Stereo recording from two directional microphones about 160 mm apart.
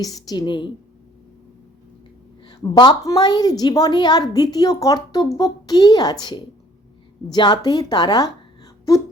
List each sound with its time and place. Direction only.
0.0 s a woman's voice: 25° left (ahead or behind)
2.5 s a woman's voice: 25° left (ahead or behind)